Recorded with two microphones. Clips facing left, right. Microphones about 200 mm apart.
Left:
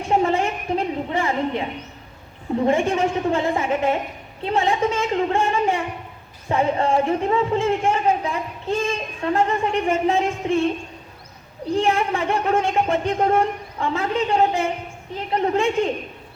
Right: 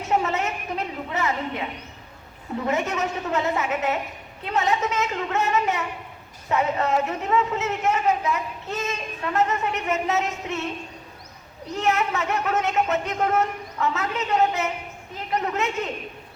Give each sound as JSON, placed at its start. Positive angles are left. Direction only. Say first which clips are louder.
{"t": 0.0, "sound": "a sound", "louder": "left 4 dB", "side_deg": 30}
{"t": 2.6, "sound": "a man's voice", "louder": "left 6 dB", "side_deg": 30}
{"t": 11.7, "sound": "a man's voice", "louder": "left 4 dB", "side_deg": 30}